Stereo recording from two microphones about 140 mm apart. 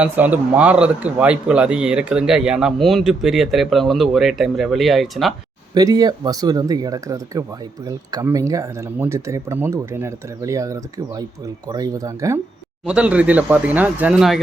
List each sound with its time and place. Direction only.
0.0 s a man's voice: 10° right (ahead or behind)
5.7 s speech: 25° right (ahead or behind)
12.8 s speech: 10° right (ahead or behind)